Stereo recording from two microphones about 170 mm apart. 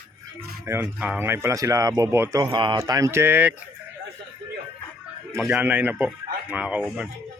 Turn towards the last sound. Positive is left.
turn(degrees=-5)  # may be behind; listen again after turning